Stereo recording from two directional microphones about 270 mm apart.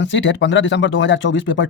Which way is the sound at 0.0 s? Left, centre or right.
Left.